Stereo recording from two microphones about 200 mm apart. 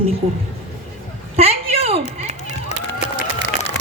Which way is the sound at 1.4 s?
30° right (ahead or behind).